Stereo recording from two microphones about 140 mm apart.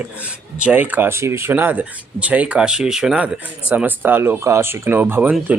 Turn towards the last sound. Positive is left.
turn(degrees=-10)  # may be behind; listen again after turning